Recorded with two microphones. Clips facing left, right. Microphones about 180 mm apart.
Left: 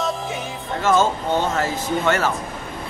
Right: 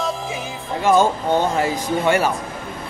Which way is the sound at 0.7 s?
15° right (ahead or behind).